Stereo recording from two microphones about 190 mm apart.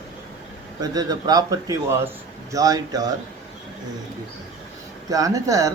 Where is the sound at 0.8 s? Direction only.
20° right (ahead or behind).